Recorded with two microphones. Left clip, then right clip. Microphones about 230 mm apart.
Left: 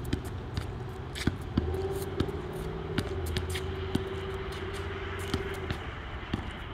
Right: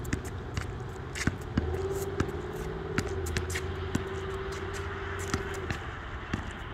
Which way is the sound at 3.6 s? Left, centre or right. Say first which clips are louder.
Left 1 dB; left.